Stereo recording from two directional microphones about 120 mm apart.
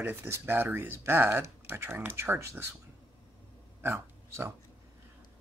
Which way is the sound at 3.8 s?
20° right (ahead or behind).